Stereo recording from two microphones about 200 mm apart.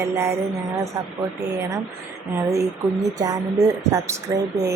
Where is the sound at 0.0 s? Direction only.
15° right (ahead or behind).